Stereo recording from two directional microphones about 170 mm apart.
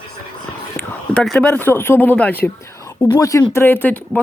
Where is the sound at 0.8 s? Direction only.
5° left (ahead or behind).